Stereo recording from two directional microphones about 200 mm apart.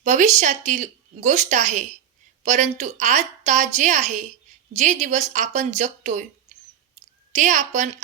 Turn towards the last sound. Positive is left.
turn(degrees=-35)  # may be behind; listen again after turning